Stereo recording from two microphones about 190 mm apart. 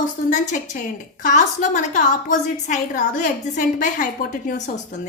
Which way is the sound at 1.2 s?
40° left (ahead or behind).